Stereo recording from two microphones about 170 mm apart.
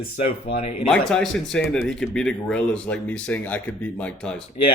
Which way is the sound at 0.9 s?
5° left (ahead or behind).